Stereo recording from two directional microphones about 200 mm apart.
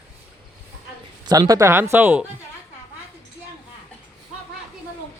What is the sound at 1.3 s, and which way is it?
Speech, 20° right (ahead or behind).